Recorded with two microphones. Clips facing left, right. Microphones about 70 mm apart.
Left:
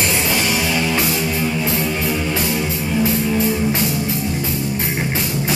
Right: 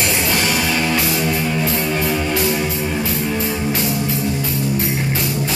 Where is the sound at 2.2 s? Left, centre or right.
Centre.